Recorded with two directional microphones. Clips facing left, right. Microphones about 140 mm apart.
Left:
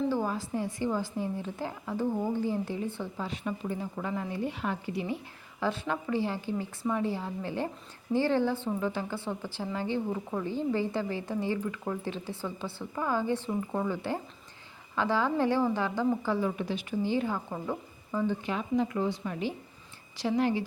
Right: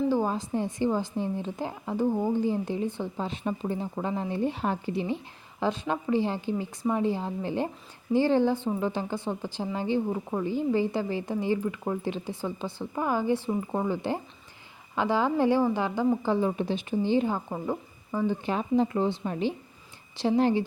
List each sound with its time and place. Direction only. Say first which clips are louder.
0.1 s a woman's voice: right 4 dB; 20° right (ahead or behind)
18.4 s a woman's voice: right 4 dB; 30° right (ahead or behind)